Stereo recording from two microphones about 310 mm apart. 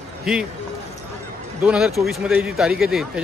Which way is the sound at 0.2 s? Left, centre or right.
Centre.